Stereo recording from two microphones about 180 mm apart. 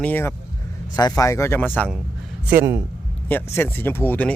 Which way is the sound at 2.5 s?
15° right (ahead or behind).